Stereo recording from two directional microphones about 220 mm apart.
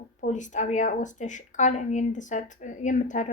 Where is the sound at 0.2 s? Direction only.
35° left (ahead or behind).